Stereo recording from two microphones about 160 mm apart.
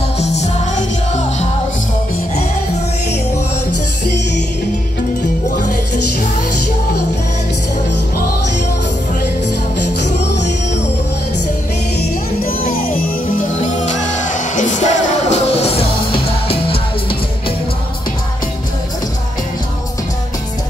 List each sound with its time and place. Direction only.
0.2 s music: 45° left (ahead or behind)
9.8 s music: 50° left (ahead or behind)
12.6 s music: 65° left (ahead or behind)
13.8 s music: 50° left (ahead or behind)